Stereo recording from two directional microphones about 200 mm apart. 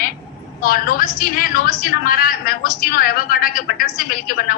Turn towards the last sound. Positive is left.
turn(degrees=45)  # may be behind; listen again after turning